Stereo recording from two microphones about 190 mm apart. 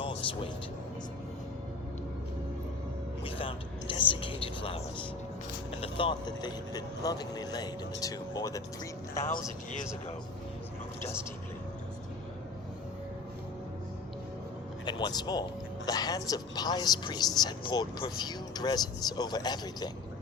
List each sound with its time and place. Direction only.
0.0 s music: 25° left (ahead or behind)
3.2 s a sound: 30° left (ahead or behind)
5.8 s speech: 25° left (ahead or behind)
11.0 s a woman's voice: 15° left (ahead or behind)
14.8 s speech: 20° left (ahead or behind)